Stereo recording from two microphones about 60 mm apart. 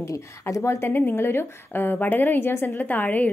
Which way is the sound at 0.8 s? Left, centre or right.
Left.